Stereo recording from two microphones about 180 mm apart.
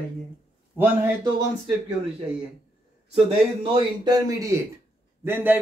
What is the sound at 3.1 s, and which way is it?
A man's voice, 30° right (ahead or behind).